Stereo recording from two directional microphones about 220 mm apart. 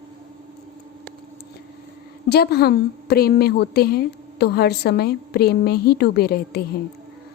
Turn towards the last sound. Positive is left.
turn(degrees=45)  # may be behind; listen again after turning